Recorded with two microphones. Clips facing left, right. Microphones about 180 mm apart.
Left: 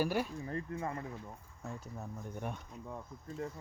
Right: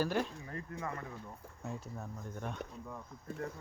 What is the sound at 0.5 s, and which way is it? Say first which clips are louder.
Speech: left 4 dB; 30° left (ahead or behind).